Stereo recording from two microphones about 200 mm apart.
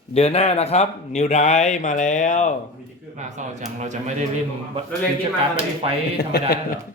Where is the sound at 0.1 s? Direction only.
30° left (ahead or behind).